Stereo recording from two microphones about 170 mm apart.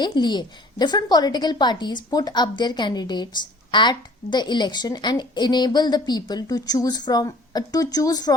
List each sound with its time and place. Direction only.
0.0 s a woman's voice: 25° left (ahead or behind)